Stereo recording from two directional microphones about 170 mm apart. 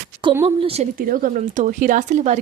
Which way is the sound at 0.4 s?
35° right (ahead or behind).